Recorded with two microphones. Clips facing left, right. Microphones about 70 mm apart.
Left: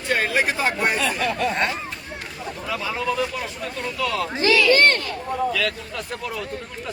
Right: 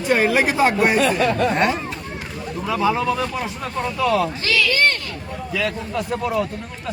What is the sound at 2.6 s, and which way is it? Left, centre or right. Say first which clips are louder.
Speech: right 6 dB; centre.